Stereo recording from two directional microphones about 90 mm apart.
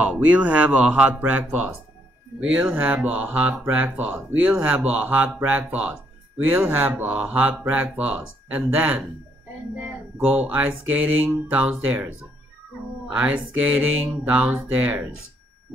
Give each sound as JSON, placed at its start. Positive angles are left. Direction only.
{"t": 0.0, "sound": "speech", "side_deg": -15}
{"t": 13.1, "sound": "speech", "side_deg": -15}